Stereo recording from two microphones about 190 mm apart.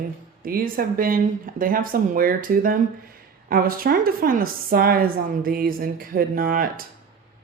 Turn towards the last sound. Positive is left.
turn(degrees=-50)  # may be behind; listen again after turning